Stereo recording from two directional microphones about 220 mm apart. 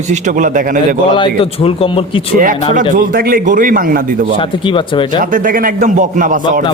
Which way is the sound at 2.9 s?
40° right (ahead or behind).